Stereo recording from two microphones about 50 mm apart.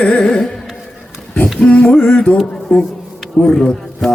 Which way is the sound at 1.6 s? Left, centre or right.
Left.